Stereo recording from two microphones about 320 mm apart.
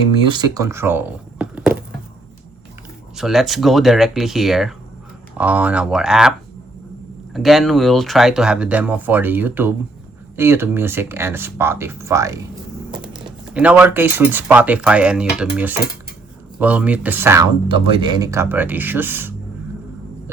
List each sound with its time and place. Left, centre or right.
0.3 s speech: centre
3.2 s speech: centre
7.3 s speech: centre
13.5 s speech: centre